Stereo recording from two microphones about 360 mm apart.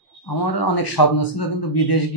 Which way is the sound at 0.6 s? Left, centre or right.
Left.